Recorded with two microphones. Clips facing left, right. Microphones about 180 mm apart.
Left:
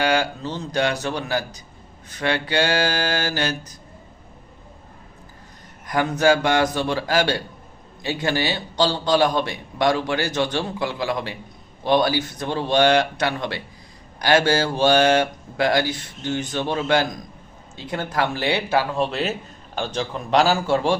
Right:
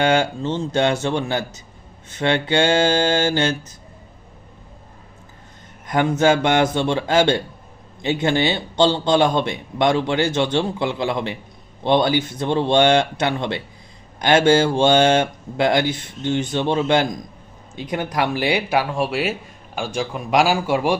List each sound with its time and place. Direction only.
0.0 s a man's voice: 25° right (ahead or behind)
5.9 s a man's voice: 25° right (ahead or behind)